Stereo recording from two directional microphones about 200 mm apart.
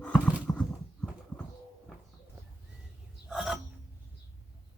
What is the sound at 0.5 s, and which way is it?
Horse, 15° left (ahead or behind).